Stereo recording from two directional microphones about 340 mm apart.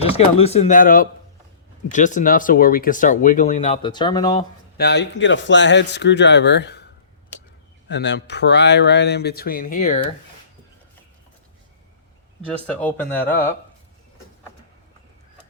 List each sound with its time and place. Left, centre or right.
0.0 s speech: centre
4.8 s speech: left
12.6 s speech: centre